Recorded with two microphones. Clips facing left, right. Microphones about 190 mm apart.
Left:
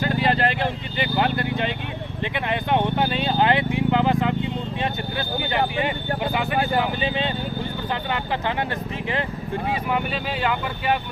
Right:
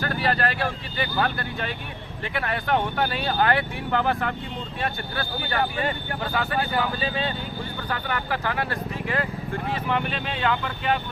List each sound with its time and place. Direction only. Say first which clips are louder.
0.0 s speech: left 3 dB; 20° left (ahead or behind)
9.6 s speech: left 1 dB; 10° left (ahead or behind)